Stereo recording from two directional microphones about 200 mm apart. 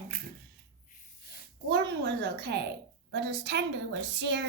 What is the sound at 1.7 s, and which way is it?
A woman's voice, 55° right (ahead or behind).